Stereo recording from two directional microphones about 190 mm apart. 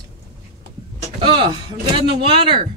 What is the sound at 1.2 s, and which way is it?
Speech, 25° right (ahead or behind).